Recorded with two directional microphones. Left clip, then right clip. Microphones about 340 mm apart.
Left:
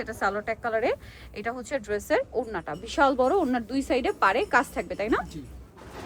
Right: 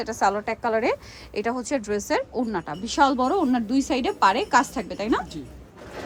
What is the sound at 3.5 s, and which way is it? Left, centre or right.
A woman's voice, centre.